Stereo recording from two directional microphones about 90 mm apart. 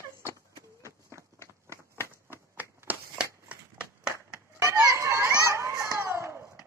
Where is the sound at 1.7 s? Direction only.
25° right (ahead or behind).